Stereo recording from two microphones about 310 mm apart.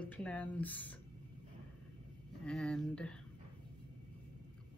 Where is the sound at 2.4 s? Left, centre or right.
Centre.